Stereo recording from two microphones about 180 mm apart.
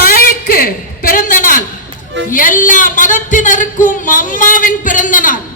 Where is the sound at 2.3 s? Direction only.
50° left (ahead or behind).